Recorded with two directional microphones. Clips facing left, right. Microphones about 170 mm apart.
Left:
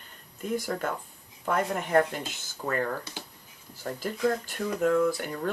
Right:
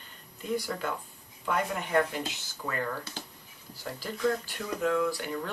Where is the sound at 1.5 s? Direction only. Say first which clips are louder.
Left 3 dB; 45° left (ahead or behind).